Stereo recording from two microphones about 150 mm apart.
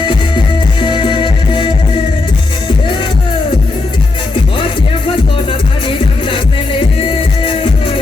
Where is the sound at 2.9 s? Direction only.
35° left (ahead or behind).